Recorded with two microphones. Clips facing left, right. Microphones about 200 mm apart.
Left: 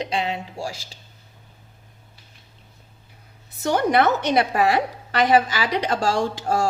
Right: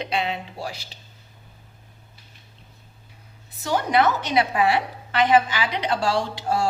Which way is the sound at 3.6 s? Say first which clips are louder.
Left 2 dB; 55° left (ahead or behind).